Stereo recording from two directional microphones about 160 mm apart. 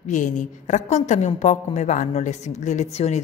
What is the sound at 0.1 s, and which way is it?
A woman's voice, 50° left (ahead or behind).